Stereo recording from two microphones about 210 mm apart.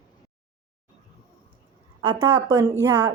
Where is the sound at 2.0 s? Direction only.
20° right (ahead or behind).